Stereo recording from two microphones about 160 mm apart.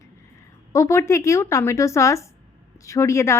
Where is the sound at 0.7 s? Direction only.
20° left (ahead or behind).